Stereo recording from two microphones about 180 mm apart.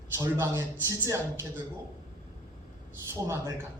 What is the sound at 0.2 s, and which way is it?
A man's voice, 15° right (ahead or behind).